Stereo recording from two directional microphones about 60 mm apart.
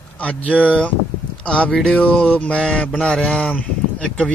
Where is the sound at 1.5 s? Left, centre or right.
Centre.